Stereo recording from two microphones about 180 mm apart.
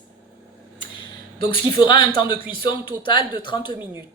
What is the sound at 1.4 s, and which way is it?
A woman's voice, 25° left (ahead or behind).